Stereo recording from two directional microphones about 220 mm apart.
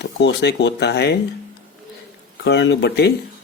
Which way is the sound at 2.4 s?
50° left (ahead or behind).